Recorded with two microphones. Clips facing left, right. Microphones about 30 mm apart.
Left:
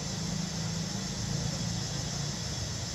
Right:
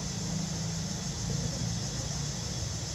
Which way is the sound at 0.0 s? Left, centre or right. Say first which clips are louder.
Even; centre.